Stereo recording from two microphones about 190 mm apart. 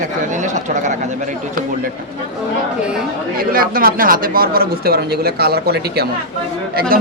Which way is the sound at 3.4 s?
50° right (ahead or behind).